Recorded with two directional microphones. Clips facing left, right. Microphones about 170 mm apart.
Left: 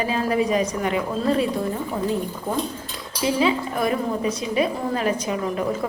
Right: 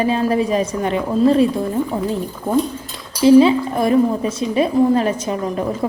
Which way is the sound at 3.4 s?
30° right (ahead or behind).